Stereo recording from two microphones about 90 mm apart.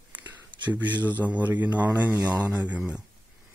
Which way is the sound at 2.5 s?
15° right (ahead or behind).